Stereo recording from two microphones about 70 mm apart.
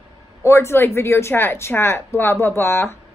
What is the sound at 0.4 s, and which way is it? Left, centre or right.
Speech, left.